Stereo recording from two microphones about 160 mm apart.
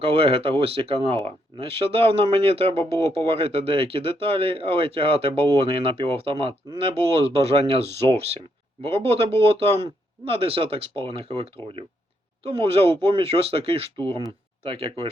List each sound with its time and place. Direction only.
0.0 s speech: 35° right (ahead or behind)